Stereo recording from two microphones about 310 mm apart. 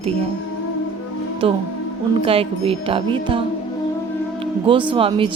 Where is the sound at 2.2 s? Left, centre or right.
Centre.